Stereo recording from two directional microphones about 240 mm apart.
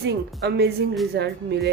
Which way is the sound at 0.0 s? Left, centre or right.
Right.